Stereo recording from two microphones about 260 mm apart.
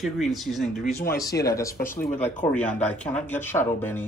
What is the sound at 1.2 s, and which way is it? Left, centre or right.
Speech, centre.